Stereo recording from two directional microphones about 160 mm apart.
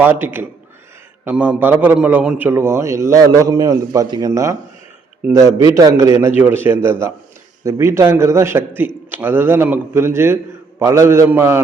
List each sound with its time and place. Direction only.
0.0 s a man's voice: 10° right (ahead or behind)